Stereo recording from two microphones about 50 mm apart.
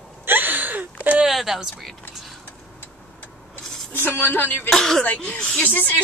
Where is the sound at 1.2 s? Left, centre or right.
Centre.